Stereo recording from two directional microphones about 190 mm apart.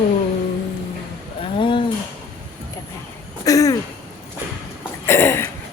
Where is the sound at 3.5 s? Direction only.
20° left (ahead or behind).